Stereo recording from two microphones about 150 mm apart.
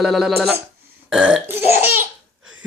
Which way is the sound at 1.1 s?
5° right (ahead or behind).